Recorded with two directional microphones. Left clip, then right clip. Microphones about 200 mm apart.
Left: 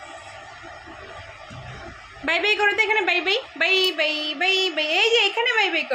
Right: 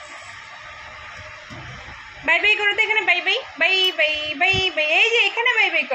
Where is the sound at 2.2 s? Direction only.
20° left (ahead or behind).